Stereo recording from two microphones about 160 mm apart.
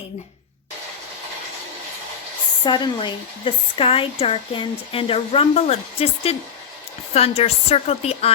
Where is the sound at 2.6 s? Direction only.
30° left (ahead or behind).